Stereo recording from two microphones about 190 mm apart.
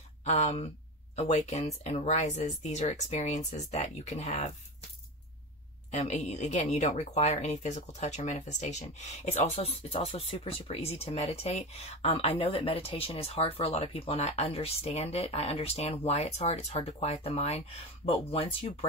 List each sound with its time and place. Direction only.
0.2 s speech: 35° left (ahead or behind)
5.9 s speech: 40° left (ahead or behind)